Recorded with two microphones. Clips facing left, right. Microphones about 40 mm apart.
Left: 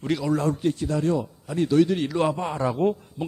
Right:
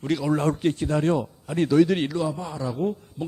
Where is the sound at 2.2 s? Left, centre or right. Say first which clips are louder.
Left 4 dB; left.